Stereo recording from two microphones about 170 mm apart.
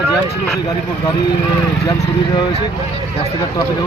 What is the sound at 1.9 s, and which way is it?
Speech, 25° left (ahead or behind).